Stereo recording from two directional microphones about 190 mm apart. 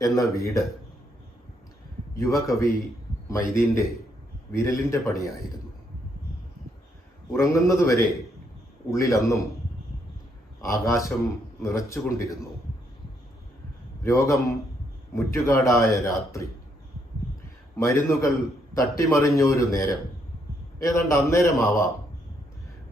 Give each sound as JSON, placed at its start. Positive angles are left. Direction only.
{"t": 0.0, "sound": "a man's voice", "side_deg": 15}
{"t": 2.1, "sound": "a man's voice", "side_deg": 15}
{"t": 7.3, "sound": "a man's voice", "side_deg": 15}
{"t": 9.0, "sound": "a man's voice", "side_deg": 15}
{"t": 10.6, "sound": "a man's voice", "side_deg": 15}
{"t": 14.0, "sound": "a man's voice", "side_deg": 15}
{"t": 17.7, "sound": "a man's voice", "side_deg": 15}
{"t": 21.1, "sound": "a man's voice", "side_deg": 15}